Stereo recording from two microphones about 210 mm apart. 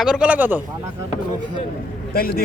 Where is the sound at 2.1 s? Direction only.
45° left (ahead or behind).